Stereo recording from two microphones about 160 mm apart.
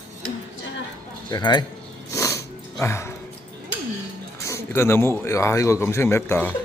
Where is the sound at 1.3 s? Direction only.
30° left (ahead or behind).